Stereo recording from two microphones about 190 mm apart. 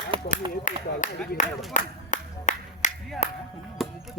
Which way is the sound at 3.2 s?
35° left (ahead or behind).